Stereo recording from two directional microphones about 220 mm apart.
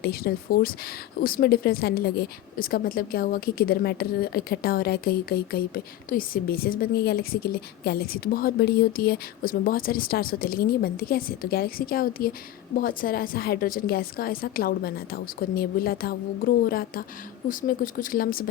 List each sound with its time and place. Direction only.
0.0 s a woman's voice: 45° left (ahead or behind)